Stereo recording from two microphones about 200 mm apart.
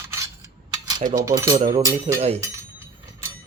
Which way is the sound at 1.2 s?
15° right (ahead or behind).